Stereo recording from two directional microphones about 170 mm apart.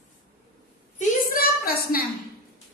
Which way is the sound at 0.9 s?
60° left (ahead or behind).